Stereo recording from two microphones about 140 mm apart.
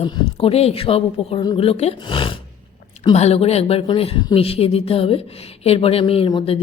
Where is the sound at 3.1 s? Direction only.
50° left (ahead or behind).